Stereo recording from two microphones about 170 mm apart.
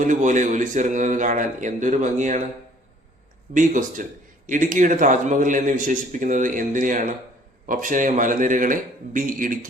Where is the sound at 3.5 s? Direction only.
50° right (ahead or behind).